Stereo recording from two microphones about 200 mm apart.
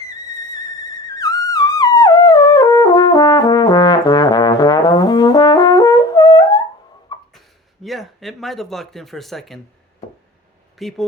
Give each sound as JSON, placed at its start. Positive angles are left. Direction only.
{"t": 1.0, "sound": "music", "side_deg": 20}
{"t": 7.3, "sound": "a sound", "side_deg": 0}
{"t": 10.8, "sound": "speech", "side_deg": 0}